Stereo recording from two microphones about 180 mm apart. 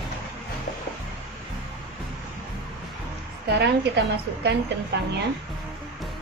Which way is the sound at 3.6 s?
70° right (ahead or behind).